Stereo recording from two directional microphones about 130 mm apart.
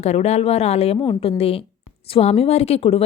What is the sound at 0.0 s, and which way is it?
Speech, 55° left (ahead or behind).